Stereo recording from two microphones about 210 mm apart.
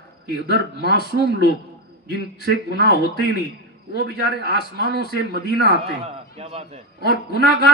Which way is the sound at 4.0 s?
50° right (ahead or behind).